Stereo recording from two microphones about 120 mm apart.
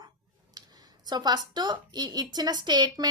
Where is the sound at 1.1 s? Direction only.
35° right (ahead or behind).